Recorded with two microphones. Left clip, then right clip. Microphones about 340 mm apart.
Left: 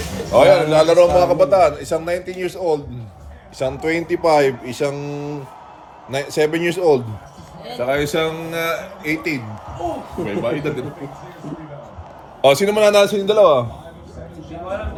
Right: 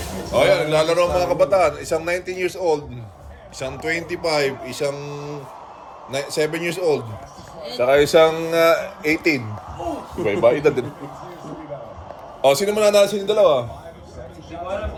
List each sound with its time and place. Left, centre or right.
0.3 s a man's voice: centre
3.6 s speech: centre
7.8 s speech: centre
12.4 s speech: left